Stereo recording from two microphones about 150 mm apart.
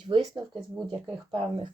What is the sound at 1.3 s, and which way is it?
Speech, 35° right (ahead or behind).